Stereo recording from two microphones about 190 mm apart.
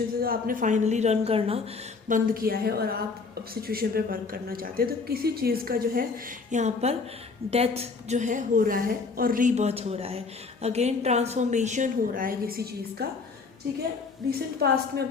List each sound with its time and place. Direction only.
0.2 s a woman's voice: 50° right (ahead or behind); by 1.6 s 30° right (ahead or behind)
2.0 s a woman's voice: 45° right (ahead or behind)
6.5 s a woman's voice: 35° right (ahead or behind); by 13.1 s 55° right (ahead or behind)
14.3 s a woman's voice: 55° right (ahead or behind)